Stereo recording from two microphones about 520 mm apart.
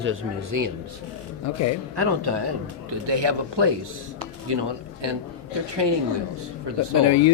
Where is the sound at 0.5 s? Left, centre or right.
Right.